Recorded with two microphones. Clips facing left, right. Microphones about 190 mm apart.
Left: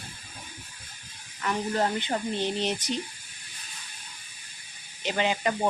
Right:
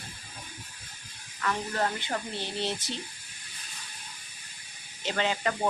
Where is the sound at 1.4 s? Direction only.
20° left (ahead or behind).